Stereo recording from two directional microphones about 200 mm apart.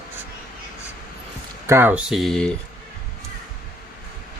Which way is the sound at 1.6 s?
10° right (ahead or behind).